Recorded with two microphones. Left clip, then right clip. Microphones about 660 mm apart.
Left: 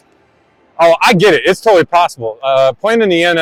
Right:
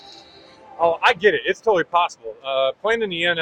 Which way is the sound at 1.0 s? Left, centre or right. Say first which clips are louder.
Left 8 dB; left.